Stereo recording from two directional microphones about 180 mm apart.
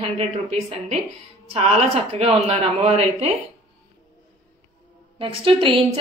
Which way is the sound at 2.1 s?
35° right (ahead or behind).